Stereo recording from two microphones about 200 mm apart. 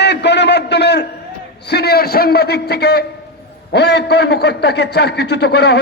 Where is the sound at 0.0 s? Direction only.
60° left (ahead or behind).